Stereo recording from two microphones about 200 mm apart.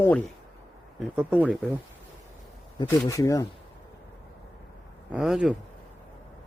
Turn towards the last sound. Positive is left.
turn(degrees=-5)  # may be behind; listen again after turning